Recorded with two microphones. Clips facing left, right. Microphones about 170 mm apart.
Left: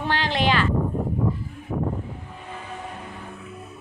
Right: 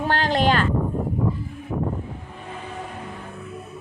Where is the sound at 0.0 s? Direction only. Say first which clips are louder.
Right 3 dB; 45° right (ahead or behind).